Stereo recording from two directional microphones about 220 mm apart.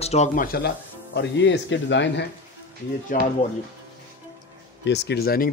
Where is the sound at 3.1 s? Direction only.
35° left (ahead or behind).